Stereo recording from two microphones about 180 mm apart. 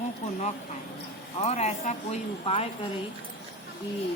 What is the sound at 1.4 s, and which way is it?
A woman's voice, 35° left (ahead or behind).